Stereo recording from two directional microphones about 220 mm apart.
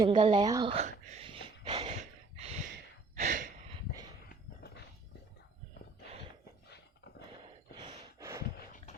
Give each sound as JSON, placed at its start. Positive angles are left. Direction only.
{"t": 0.2, "sound": "a sound", "side_deg": -25}
{"t": 3.2, "sound": "gasp", "side_deg": -35}
{"t": 7.8, "sound": "gasp", "side_deg": -15}